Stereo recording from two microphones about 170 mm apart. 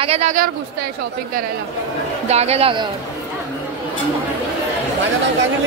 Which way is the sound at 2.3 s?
40° right (ahead or behind).